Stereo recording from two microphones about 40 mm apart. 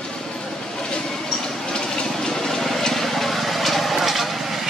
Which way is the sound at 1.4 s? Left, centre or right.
Centre.